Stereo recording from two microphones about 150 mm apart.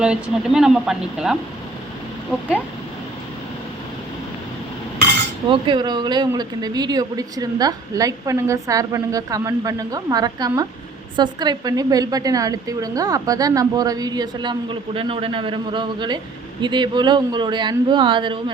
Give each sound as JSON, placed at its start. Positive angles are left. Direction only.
{"t": 0.0, "sound": "speech", "side_deg": -5}
{"t": 5.5, "sound": "a woman's voice", "side_deg": -30}